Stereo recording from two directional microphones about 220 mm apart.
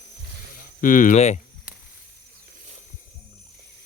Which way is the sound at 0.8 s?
35° left (ahead or behind).